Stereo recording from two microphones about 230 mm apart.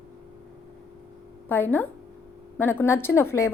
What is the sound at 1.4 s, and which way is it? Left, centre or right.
A woman's voice, centre.